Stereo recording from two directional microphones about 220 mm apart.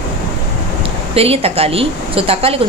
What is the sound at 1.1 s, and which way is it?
A woman's voice, 25° right (ahead or behind).